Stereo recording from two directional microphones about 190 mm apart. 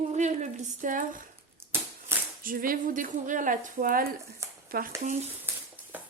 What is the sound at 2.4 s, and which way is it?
Speech, 45° right (ahead or behind).